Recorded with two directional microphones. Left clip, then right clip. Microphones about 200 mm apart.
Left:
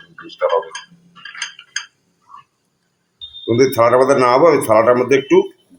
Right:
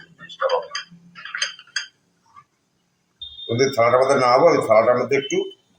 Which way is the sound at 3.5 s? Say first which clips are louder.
Left 4 dB; 55° left (ahead or behind).